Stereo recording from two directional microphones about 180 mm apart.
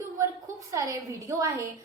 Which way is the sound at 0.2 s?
15° right (ahead or behind).